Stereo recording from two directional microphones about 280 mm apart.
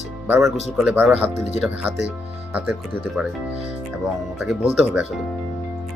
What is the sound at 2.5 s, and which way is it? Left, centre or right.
Speech, centre.